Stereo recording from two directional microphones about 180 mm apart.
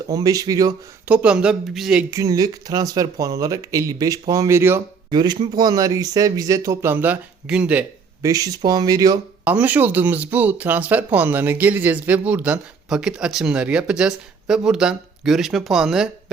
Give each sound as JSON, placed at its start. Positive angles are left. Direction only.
{"t": 0.1, "sound": "speech", "side_deg": -20}
{"t": 1.0, "sound": "speech", "side_deg": -5}
{"t": 2.0, "sound": "speech", "side_deg": -20}
{"t": 5.1, "sound": "speech", "side_deg": -25}
{"t": 8.3, "sound": "speech", "side_deg": -20}
{"t": 9.4, "sound": "speech", "side_deg": -10}